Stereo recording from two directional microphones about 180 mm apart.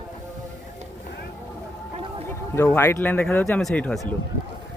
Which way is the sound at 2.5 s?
15° left (ahead or behind).